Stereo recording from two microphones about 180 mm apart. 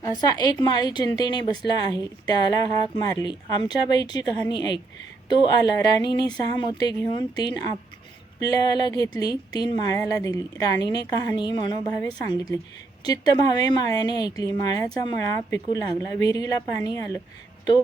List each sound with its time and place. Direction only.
0.0 s speech: 20° left (ahead or behind)